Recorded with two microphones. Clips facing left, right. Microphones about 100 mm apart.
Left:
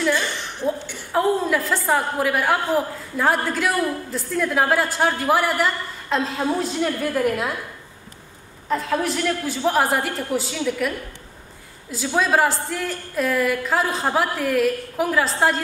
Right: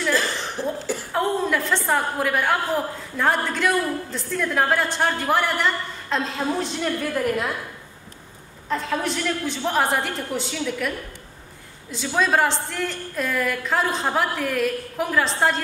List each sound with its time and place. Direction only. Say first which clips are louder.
0.1 s a sound: even; 35° right (ahead or behind)
1.1 s chuckle: left 3 dB; centre (ahead or behind)
1.9 s a woman's voice: left 3 dB; centre (ahead or behind)
8.6 s a woman's voice: left 2 dB; 5° left (ahead or behind)
12.2 s a woman's voice: left 1 dB; 5° left (ahead or behind)